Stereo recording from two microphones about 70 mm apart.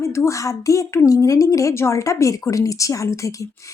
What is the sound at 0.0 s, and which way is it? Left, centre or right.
A woman's voice, left.